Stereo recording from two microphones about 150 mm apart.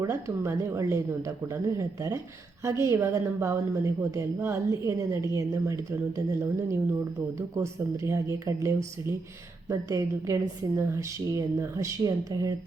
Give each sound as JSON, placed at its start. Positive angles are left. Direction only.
{"t": 0.0, "sound": "speech", "side_deg": -20}